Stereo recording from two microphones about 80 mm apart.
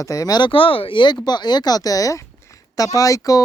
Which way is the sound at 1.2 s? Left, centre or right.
Left.